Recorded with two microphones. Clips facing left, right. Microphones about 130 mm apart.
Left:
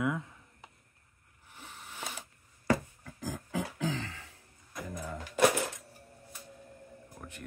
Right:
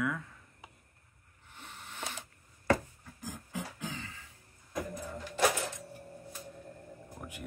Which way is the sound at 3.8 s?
90° left.